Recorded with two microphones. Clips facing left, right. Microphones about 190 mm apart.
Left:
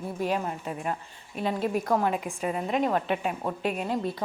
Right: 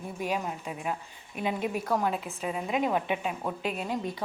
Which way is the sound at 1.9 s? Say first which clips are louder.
Left 3 dB; 10° left (ahead or behind).